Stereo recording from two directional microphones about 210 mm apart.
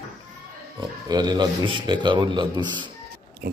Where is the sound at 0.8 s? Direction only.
20° right (ahead or behind).